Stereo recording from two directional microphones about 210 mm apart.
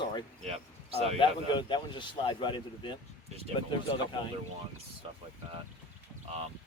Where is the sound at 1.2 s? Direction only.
20° left (ahead or behind).